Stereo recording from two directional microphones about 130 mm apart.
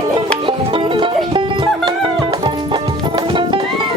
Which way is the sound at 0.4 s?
40° right (ahead or behind).